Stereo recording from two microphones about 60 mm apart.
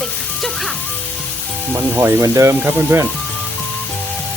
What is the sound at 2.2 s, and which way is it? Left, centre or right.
Speech, right.